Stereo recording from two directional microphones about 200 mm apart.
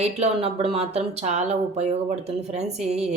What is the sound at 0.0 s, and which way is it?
A woman's voice, 30° right (ahead or behind).